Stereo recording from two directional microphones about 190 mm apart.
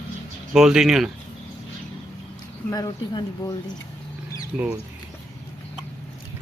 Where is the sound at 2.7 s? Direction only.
20° left (ahead or behind).